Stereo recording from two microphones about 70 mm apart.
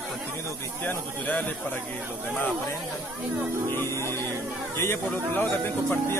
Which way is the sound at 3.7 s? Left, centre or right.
Left.